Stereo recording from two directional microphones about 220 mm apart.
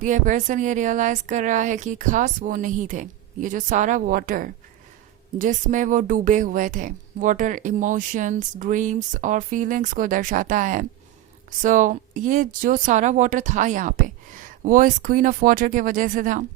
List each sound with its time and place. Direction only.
0.0 s speech: 35° right (ahead or behind)